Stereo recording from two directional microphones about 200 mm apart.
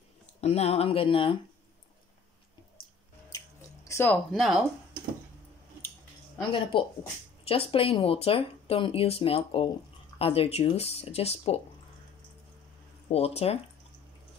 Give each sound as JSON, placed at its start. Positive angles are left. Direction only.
{"t": 0.4, "sound": "speech", "side_deg": 30}
{"t": 3.3, "sound": "squish", "side_deg": 15}
{"t": 6.5, "sound": "speech", "side_deg": 25}
{"t": 13.1, "sound": "speech", "side_deg": 30}